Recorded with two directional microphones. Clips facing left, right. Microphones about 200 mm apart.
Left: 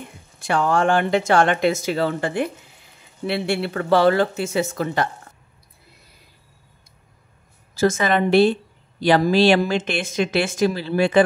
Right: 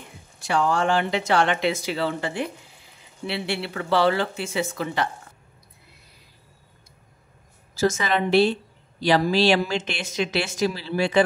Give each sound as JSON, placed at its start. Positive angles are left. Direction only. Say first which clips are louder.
{"t": 0.4, "sound": "speech", "louder": "left 3 dB", "side_deg": 55}
{"t": 7.7, "sound": "speech", "louder": "left 4 dB", "side_deg": 55}